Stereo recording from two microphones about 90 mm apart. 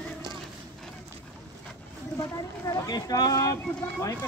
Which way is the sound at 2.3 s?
40° left (ahead or behind).